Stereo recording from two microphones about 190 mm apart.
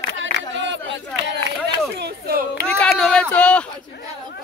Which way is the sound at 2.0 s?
55° right (ahead or behind).